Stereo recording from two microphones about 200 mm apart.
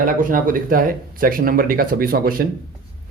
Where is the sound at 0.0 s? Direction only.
45° right (ahead or behind).